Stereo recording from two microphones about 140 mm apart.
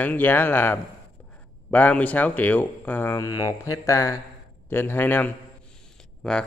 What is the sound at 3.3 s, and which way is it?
Mantra, 25° left (ahead or behind).